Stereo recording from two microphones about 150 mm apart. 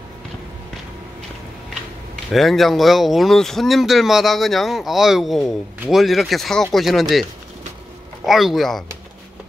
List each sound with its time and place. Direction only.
2.3 s speech: centre (ahead or behind)
8.3 s speech: centre (ahead or behind)